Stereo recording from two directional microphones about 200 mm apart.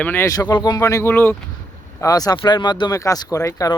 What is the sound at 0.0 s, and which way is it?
Speech, 10° left (ahead or behind).